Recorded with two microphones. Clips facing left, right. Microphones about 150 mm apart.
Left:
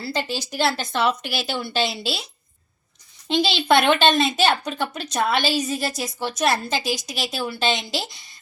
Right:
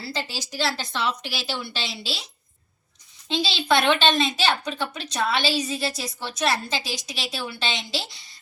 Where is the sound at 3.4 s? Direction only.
60° left (ahead or behind).